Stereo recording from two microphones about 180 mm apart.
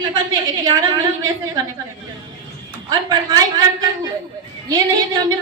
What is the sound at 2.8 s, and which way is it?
A man's voice, 20° right (ahead or behind).